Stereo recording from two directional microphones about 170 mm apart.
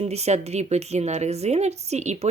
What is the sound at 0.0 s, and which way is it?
A woman's voice, 40° right (ahead or behind).